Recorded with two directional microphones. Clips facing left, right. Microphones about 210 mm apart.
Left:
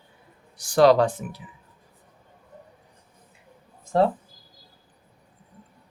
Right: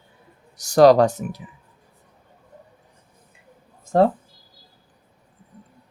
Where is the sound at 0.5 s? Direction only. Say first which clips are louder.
Right 4 dB; 40° right (ahead or behind).